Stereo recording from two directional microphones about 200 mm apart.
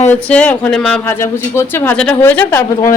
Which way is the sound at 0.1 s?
5° left (ahead or behind).